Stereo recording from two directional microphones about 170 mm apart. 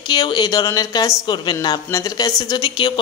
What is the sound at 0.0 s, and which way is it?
A woman's voice, 25° left (ahead or behind).